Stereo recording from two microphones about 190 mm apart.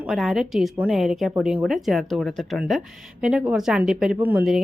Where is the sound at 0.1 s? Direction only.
Centre (ahead or behind).